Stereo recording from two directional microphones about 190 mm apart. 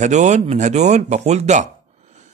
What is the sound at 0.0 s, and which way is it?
Speech, 40° right (ahead or behind).